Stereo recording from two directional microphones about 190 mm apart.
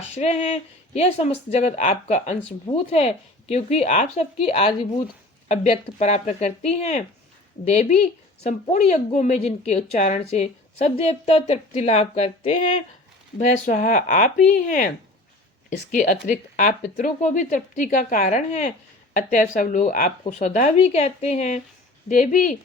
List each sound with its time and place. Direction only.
0.1 s speech: 35° left (ahead or behind)
15.9 s speech: 45° left (ahead or behind)